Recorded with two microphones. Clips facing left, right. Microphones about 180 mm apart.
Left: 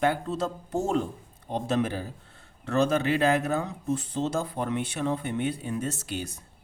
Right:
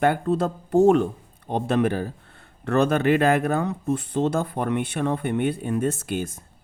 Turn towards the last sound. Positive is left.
turn(degrees=-50)  # may be behind; listen again after turning